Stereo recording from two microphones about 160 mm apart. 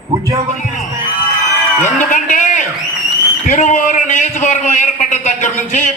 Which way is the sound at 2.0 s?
50° left (ahead or behind).